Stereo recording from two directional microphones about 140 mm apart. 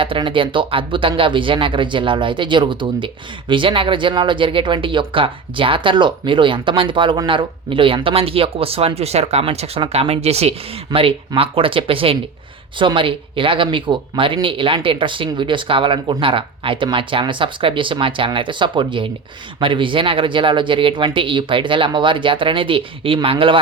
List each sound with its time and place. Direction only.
0.0 s speech: 40° right (ahead or behind)
10.9 s speech: 30° right (ahead or behind)
11.3 s speech: 40° right (ahead or behind)